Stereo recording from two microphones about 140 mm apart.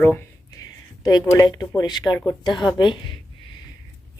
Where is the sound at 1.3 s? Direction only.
25° left (ahead or behind).